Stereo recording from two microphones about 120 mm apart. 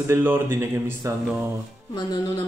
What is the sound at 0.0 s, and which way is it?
Speech, 20° right (ahead or behind).